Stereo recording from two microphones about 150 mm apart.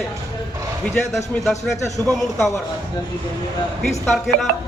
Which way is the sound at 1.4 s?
Centre (ahead or behind).